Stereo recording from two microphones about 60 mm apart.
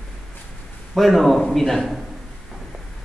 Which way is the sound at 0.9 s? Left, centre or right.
Centre.